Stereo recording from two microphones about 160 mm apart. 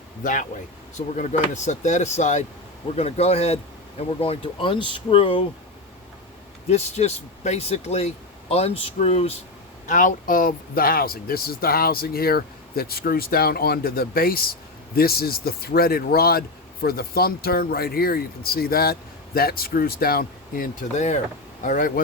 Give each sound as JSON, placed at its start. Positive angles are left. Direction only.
{"t": 0.2, "sound": "speech", "side_deg": 55}
{"t": 6.7, "sound": "speech", "side_deg": 45}
{"t": 9.8, "sound": "speech", "side_deg": 55}